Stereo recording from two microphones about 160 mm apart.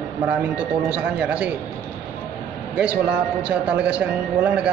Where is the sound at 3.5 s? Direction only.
5° right (ahead or behind).